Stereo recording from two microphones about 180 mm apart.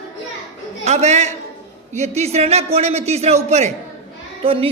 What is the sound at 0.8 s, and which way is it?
A man's voice, 40° right (ahead or behind).